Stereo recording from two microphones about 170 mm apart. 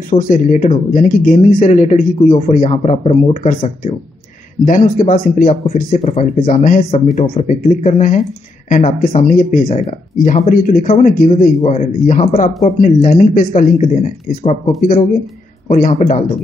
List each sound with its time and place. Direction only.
0.2 s speech: 50° left (ahead or behind)
6.9 s speech: 40° left (ahead or behind)